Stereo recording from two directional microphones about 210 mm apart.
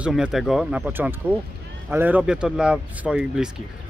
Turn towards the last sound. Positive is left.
turn(degrees=-5)  # may be behind; listen again after turning